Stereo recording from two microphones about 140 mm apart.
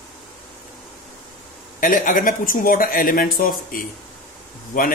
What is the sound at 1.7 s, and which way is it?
Speech, 80° left.